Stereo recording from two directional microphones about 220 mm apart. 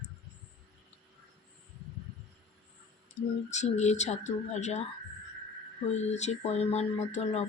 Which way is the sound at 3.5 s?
30° left (ahead or behind).